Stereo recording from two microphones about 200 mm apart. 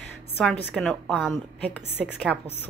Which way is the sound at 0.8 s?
Centre (ahead or behind).